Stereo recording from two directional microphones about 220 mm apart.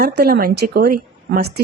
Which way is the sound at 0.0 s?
45° right (ahead or behind).